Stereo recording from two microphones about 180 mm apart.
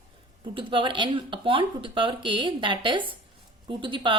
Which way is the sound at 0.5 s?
30° right (ahead or behind).